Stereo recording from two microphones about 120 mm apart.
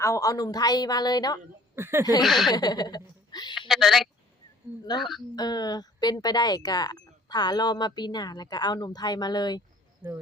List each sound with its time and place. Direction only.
0.0 s speech: 25° left (ahead or behind)
1.7 s speech: 20° right (ahead or behind)
2.2 s speech: centre (ahead or behind)
2.5 s speech: 35° left (ahead or behind)
3.3 s a sound: 40° left (ahead or behind)
3.7 s speech: centre (ahead or behind)
5.4 s speech: 35° left (ahead or behind)
10.0 s speech: 15° right (ahead or behind)